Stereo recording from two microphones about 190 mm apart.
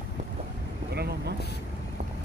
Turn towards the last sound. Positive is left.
turn(degrees=-55)  # may be behind; listen again after turning